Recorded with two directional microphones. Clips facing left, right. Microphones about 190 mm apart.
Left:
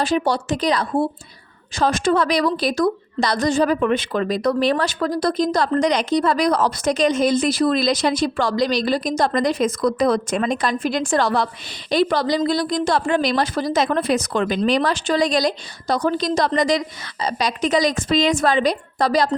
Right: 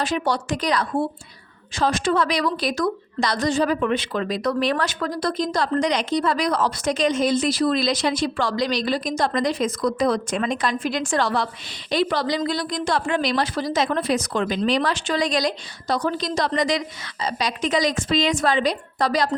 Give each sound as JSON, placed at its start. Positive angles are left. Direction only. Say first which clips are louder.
{"t": 0.0, "sound": "speech", "louder": "left 3 dB", "side_deg": 30}
{"t": 1.7, "sound": "a woman's voice", "louder": "left 3 dB", "side_deg": 45}
{"t": 3.3, "sound": "a woman's voice", "louder": "left 3 dB", "side_deg": 45}
{"t": 4.6, "sound": "a woman's voice", "louder": "left 4 dB", "side_deg": 30}
{"t": 14.6, "sound": "a woman's voice", "louder": "left 3 dB", "side_deg": 40}